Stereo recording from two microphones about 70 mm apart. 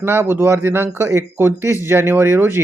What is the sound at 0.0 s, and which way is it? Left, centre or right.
Speech, right.